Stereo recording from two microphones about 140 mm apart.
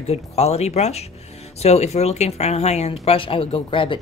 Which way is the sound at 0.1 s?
50° left (ahead or behind).